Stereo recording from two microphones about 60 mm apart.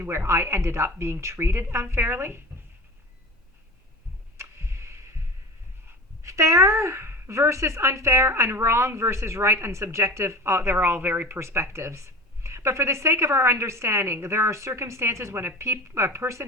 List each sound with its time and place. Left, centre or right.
0.0 s speech: right
4.4 s tick-tock: right
6.2 s speech: right
11.3 s speech: right